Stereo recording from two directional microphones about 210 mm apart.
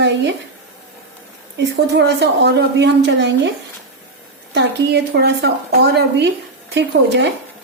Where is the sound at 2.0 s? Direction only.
55° right (ahead or behind).